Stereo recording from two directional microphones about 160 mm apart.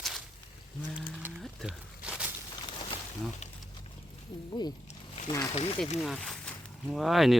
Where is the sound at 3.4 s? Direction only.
45° left (ahead or behind).